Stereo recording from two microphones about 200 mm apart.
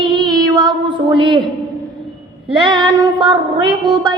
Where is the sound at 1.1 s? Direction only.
25° right (ahead or behind).